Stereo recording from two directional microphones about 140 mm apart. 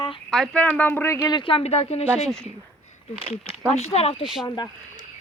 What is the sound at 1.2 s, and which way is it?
Speech, 35° left (ahead or behind).